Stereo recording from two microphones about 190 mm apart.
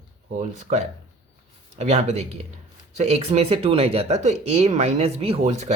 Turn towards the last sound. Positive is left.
turn(degrees=-40)  # may be behind; listen again after turning